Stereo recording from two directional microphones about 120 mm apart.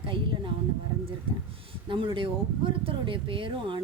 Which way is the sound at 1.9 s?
45° right (ahead or behind).